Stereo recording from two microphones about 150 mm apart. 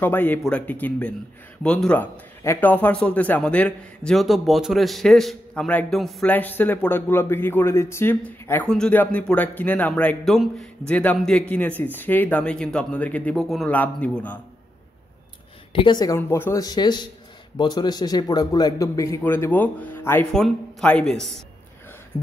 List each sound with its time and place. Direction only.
0.0 s a man's voice: 15° left (ahead or behind)
6.3 s speech: 10° left (ahead or behind)
15.7 s speech: 30° left (ahead or behind)
16.2 s a man's voice: 15° left (ahead or behind)